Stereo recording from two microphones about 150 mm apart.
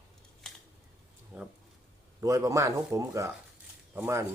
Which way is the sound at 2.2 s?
20° right (ahead or behind).